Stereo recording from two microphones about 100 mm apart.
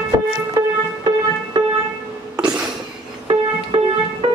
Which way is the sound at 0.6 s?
40° right (ahead or behind).